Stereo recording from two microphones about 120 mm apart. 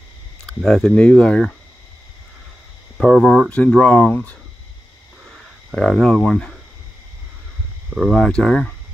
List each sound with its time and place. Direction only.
0.5 s speech: 5° left (ahead or behind)
3.0 s speech: centre (ahead or behind)
5.2 s a sound: centre (ahead or behind)
7.9 s speech: centre (ahead or behind)